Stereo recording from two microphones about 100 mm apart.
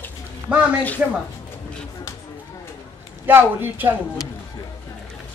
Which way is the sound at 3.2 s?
20° right (ahead or behind).